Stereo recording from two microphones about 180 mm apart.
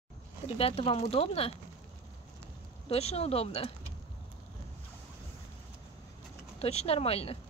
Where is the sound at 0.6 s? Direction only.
30° left (ahead or behind).